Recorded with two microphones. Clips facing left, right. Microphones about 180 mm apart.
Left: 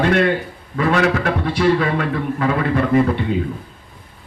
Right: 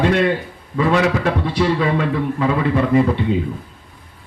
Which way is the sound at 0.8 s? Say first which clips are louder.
Right 1 dB; 25° right (ahead or behind).